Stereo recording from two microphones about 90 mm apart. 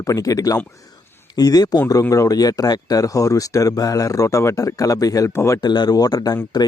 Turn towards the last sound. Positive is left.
turn(degrees=45)  # may be behind; listen again after turning